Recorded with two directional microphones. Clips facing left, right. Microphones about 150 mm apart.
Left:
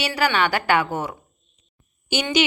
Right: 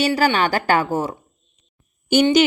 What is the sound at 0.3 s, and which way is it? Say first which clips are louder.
Speech: right 2 dB; 40° right (ahead or behind).